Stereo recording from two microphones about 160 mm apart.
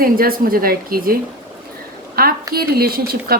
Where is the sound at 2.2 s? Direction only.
65° right (ahead or behind).